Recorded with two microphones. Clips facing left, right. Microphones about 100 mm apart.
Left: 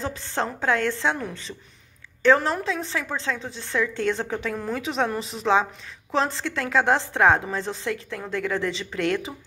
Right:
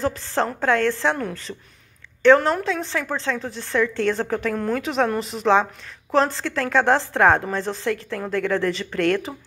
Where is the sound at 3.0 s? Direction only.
Centre (ahead or behind).